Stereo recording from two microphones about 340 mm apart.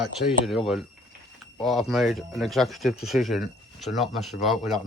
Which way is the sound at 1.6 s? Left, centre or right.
Centre.